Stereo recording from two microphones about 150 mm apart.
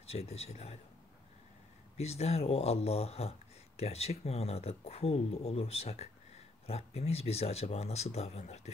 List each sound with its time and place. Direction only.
0.0 s speech: 45° left (ahead or behind)
2.0 s speech: 45° left (ahead or behind)